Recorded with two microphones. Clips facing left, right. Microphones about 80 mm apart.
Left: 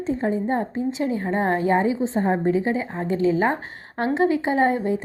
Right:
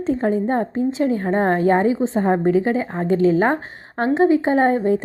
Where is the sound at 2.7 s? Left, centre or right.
Right.